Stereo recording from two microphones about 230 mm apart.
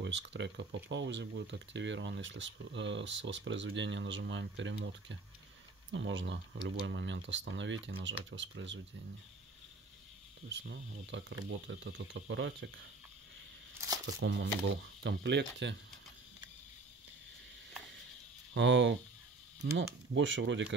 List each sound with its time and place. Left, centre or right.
0.0 s speech: right
10.6 s speech: right
14.0 s speech: right
18.5 s speech: right